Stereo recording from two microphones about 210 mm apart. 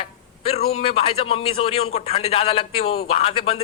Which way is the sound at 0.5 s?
25° left (ahead or behind).